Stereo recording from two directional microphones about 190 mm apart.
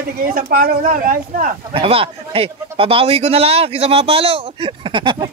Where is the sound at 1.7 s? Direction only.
30° right (ahead or behind).